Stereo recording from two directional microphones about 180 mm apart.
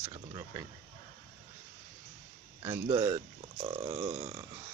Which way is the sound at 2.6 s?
15° right (ahead or behind).